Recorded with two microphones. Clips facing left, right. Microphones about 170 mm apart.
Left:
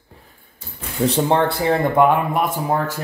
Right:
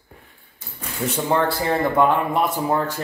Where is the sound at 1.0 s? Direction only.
30° left (ahead or behind).